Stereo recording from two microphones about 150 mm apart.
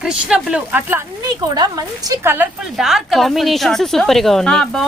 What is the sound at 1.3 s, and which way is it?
Speech, 25° right (ahead or behind).